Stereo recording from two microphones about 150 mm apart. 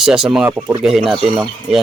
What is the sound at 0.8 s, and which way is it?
Speech, centre (ahead or behind).